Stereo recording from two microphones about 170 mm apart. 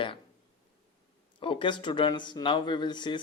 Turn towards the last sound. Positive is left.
turn(degrees=25)  # may be behind; listen again after turning